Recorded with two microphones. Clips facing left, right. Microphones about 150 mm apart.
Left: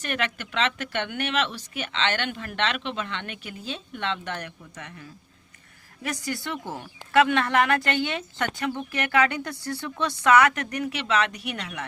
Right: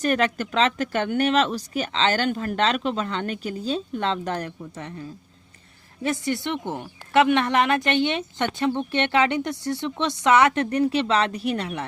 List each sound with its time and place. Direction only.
0.0 s a woman's voice: 40° right (ahead or behind)